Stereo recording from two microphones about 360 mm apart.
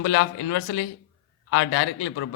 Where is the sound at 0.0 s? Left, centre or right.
Left.